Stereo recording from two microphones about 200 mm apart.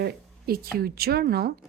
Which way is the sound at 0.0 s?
50° right (ahead or behind).